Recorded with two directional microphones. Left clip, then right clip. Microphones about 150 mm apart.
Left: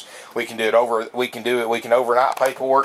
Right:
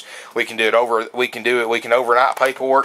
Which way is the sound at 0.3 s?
25° right (ahead or behind).